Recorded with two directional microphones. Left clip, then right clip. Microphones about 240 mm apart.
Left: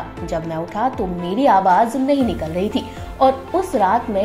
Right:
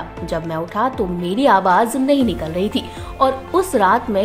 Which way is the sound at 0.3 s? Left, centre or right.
Centre.